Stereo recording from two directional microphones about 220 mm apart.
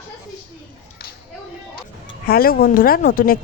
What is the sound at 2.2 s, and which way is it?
Speech, 40° left (ahead or behind).